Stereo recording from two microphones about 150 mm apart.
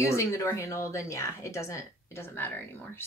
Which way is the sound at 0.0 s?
20° left (ahead or behind).